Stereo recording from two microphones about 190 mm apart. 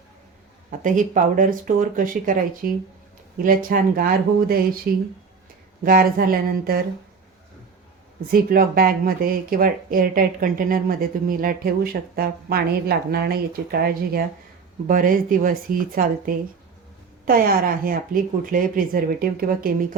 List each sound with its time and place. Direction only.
0.8 s speech: 45° right (ahead or behind)
5.8 s speech: 50° right (ahead or behind)
8.3 s speech: 50° right (ahead or behind)